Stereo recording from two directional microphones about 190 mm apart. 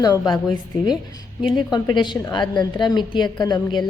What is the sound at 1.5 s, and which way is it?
A woman's voice, 25° left (ahead or behind).